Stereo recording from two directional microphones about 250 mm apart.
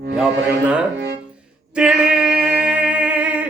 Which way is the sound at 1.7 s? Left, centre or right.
Centre.